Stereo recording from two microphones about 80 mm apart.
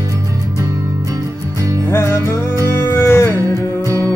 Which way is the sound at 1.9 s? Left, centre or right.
Left.